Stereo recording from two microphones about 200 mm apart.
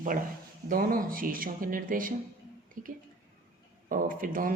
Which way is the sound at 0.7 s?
45° right (ahead or behind).